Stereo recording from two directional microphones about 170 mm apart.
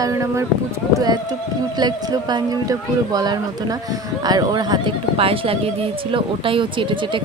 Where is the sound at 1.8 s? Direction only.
25° right (ahead or behind).